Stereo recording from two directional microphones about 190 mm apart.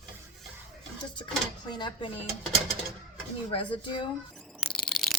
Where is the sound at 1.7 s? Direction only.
25° left (ahead or behind).